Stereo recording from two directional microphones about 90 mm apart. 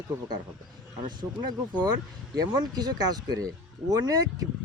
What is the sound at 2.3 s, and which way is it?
Speech, 50° right (ahead or behind).